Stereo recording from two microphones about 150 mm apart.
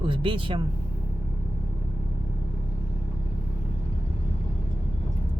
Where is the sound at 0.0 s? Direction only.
35° right (ahead or behind).